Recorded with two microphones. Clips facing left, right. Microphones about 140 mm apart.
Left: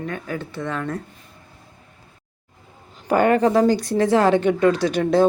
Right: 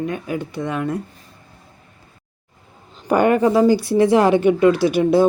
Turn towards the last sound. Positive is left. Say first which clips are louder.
# right 3 dB
turn(degrees=-10)  # may be behind; listen again after turning